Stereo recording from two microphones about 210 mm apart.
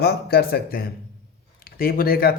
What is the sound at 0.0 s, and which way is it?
Speech, 50° left (ahead or behind).